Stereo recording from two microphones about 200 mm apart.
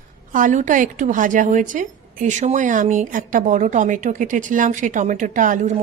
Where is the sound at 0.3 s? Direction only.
40° right (ahead or behind).